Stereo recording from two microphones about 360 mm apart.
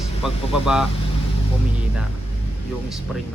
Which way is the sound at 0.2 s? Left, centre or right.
Centre.